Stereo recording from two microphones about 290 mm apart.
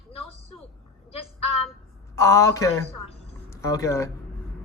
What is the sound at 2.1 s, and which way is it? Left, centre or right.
A man's voice, centre.